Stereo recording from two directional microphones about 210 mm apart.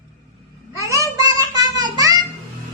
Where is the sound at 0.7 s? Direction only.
15° right (ahead or behind).